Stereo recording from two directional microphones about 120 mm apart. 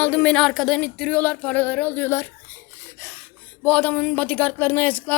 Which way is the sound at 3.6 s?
10° left (ahead or behind).